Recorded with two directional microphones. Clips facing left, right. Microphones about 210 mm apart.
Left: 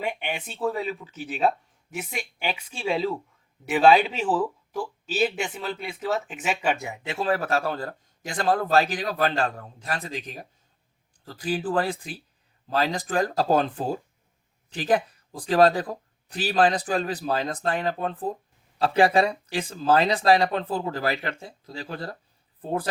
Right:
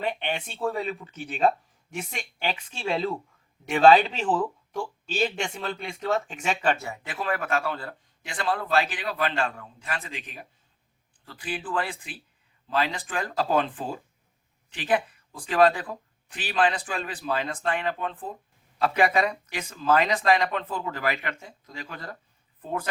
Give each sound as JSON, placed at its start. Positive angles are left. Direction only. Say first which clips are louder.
{"t": 0.0, "sound": "a man's voice", "louder": "right 1 dB", "side_deg": 10}